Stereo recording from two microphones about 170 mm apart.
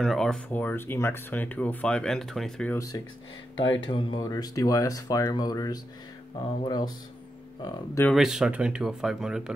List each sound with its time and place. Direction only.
0.0 s speech: 5° left (ahead or behind)
2.7 s speech: 20° left (ahead or behind)
8.1 s speech: centre (ahead or behind)